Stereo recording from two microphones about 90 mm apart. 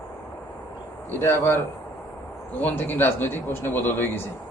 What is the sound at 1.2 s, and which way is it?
A man's voice, 25° left (ahead or behind).